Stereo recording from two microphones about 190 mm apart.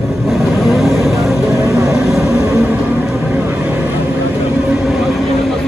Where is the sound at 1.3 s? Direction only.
15° right (ahead or behind).